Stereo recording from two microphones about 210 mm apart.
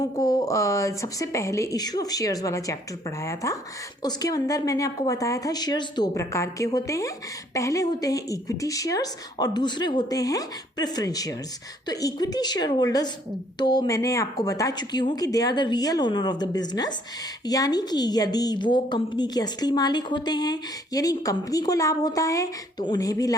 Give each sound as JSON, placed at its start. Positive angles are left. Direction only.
{"t": 0.0, "sound": "a woman's voice", "side_deg": 20}